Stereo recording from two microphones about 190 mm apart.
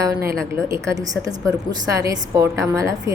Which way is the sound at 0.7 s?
15° right (ahead or behind).